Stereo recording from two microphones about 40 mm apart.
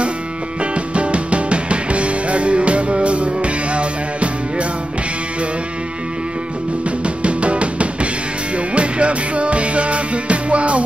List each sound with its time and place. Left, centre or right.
0.9 s music: right
7.2 s music: right